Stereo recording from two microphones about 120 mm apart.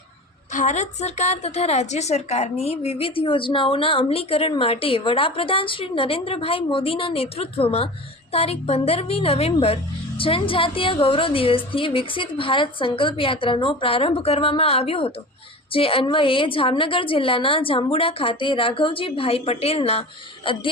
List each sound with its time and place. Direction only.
0.5 s a woman's voice: 85° left; by 20.6 s 50° left (ahead or behind)